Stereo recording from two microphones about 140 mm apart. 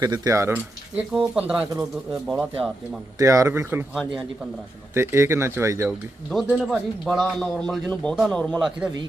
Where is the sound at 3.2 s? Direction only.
20° right (ahead or behind).